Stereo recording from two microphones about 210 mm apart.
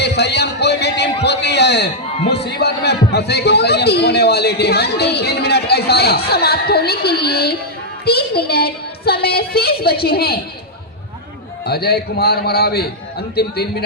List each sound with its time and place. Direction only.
0.0 s a man's voice: 55° left (ahead or behind)
11.6 s a woman's voice: 50° left (ahead or behind)